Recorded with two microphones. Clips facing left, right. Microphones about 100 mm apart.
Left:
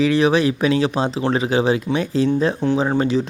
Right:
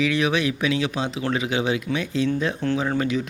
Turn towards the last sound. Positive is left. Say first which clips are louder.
# left 5 dB
turn(degrees=30)  # may be behind; listen again after turning